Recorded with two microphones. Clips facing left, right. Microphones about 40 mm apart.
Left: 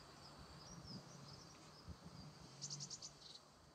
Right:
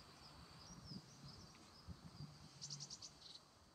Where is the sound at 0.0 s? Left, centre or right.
Centre.